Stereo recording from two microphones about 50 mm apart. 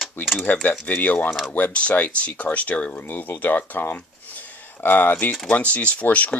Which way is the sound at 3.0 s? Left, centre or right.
Left.